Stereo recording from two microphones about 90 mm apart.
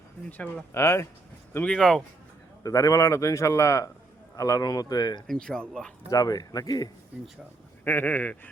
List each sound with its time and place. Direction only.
0.3 s speech: 15° left (ahead or behind)
0.7 s a man's voice: 30° left (ahead or behind)
1.7 s speech: 5° left (ahead or behind)
2.6 s a man's voice: 35° left (ahead or behind)
5.2 s speech: 5° left (ahead or behind)
6.1 s speech: 45° left (ahead or behind)
7.9 s speech: 20° left (ahead or behind)